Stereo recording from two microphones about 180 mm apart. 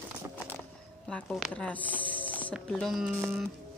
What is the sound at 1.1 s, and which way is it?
A woman's voice, 5° left (ahead or behind).